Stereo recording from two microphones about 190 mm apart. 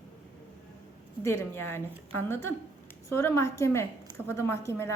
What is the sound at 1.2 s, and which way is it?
A woman's voice, 15° left (ahead or behind).